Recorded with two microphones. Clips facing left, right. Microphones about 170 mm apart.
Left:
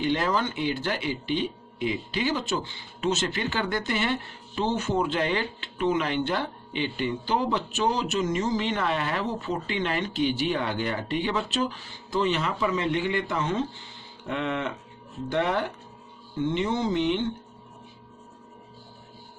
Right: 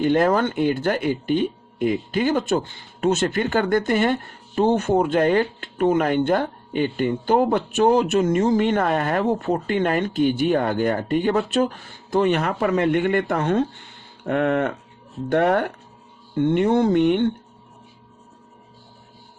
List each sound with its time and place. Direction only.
0.0 s speech: 50° right (ahead or behind)